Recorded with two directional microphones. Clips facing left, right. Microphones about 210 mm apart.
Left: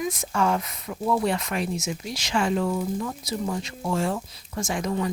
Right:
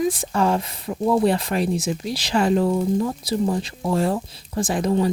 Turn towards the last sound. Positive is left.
turn(degrees=-30)  # may be behind; listen again after turning